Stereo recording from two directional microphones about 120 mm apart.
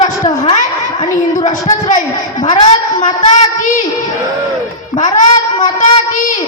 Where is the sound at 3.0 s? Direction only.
80° left.